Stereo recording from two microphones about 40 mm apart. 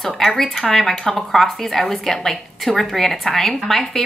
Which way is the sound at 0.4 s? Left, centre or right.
Centre.